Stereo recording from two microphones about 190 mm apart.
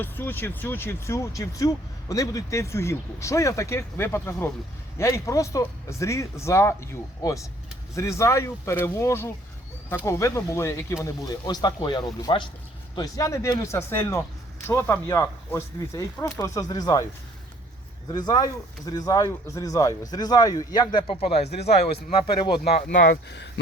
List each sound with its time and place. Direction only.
0.0 s speech: 10° left (ahead or behind)
18.3 s speech: 20° left (ahead or behind)
22.9 s speech: 70° left (ahead or behind)